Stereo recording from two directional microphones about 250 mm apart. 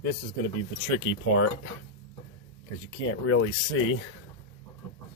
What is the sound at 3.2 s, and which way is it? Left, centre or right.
Speech, left.